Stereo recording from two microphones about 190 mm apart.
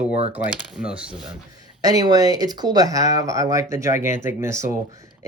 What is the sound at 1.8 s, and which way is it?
Speech, 20° right (ahead or behind).